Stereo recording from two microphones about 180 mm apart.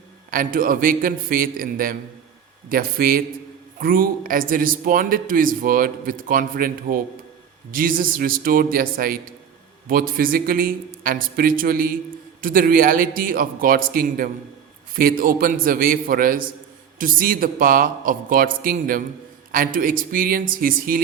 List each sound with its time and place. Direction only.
0.3 s a man's voice: 50° right (ahead or behind)